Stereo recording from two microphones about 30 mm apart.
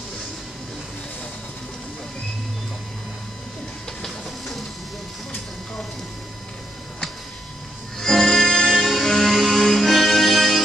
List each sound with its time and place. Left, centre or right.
4.0 s printer: centre
8.0 s music: centre